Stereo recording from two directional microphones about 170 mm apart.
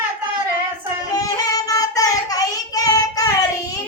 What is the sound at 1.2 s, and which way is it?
Child singing, 20° left (ahead or behind).